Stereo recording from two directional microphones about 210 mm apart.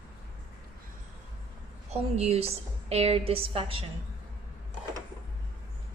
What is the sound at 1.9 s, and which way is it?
A woman's voice, 30° right (ahead or behind).